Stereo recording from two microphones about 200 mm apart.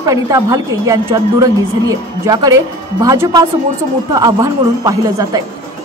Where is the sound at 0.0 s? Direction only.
15° right (ahead or behind).